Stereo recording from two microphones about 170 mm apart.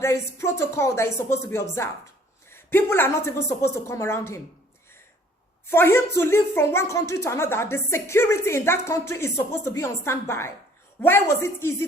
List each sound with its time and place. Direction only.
0.0 s a woman's voice: 15° left (ahead or behind)
5.7 s a woman's voice: 15° left (ahead or behind)